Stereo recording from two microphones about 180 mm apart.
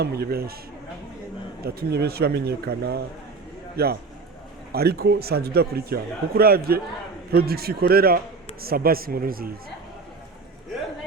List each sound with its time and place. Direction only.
0.0 s a man's voice: 60° right (ahead or behind)
1.6 s a man's voice: 60° right (ahead or behind)